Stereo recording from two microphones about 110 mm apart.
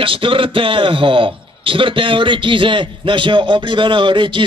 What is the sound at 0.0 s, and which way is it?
A man's voice, 50° right (ahead or behind).